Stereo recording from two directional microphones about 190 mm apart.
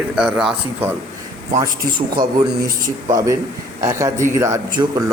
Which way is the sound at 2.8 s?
20° right (ahead or behind).